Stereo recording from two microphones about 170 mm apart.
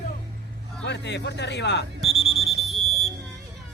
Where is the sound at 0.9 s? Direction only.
90° left.